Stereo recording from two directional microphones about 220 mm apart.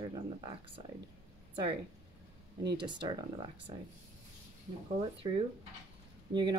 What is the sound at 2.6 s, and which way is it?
Speech, 50° right (ahead or behind).